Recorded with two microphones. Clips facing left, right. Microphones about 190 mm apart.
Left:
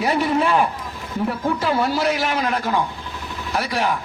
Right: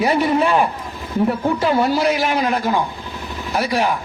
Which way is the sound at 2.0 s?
5° right (ahead or behind).